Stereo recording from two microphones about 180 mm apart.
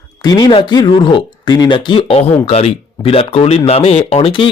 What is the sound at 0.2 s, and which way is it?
Speech, 20° left (ahead or behind).